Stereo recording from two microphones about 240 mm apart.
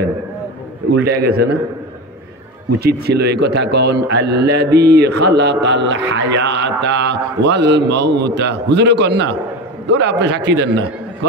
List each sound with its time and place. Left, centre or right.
1.0 s a man's voice: right
2.8 s a man's voice: right